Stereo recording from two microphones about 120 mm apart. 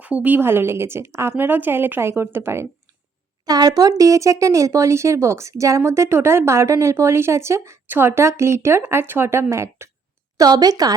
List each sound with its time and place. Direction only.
0.0 s speech: 15° right (ahead or behind)
3.4 s speech: 35° right (ahead or behind)
10.3 s a woman's voice: 35° right (ahead or behind)